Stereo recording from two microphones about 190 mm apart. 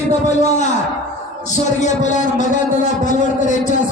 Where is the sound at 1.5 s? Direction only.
40° left (ahead or behind).